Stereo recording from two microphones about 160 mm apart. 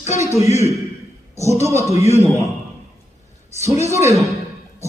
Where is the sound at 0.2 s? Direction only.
20° right (ahead or behind).